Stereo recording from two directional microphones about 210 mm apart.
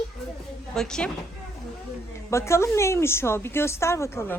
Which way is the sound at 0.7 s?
5° left (ahead or behind).